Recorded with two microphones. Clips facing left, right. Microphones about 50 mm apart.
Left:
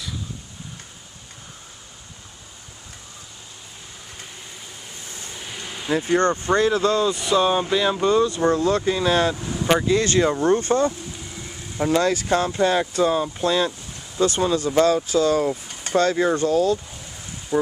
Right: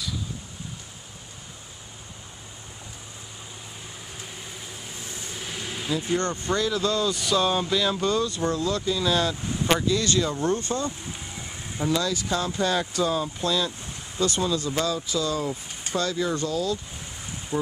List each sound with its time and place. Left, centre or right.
5.2 s vehicle: centre
5.9 s speech: left
7.1 s speech: centre; by 9.3 s left
9.3 s speech: left
12.5 s speech: left